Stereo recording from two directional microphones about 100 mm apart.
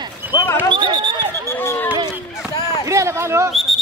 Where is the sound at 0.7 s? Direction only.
50° right (ahead or behind).